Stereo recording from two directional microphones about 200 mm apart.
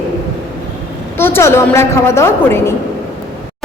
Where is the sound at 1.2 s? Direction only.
10° left (ahead or behind).